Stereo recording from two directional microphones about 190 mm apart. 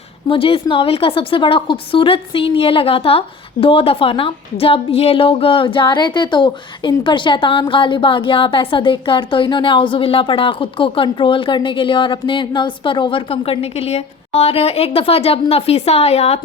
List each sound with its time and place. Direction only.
0.3 s a woman's voice: 30° left (ahead or behind)